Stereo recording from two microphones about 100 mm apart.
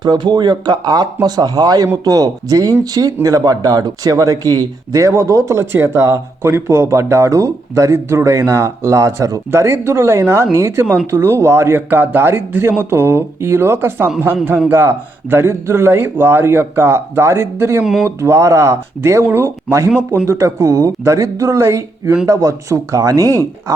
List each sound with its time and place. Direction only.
0.0 s speech: 45° right (ahead or behind)